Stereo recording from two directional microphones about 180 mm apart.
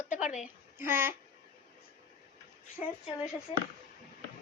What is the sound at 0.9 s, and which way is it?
Speech, 10° right (ahead or behind).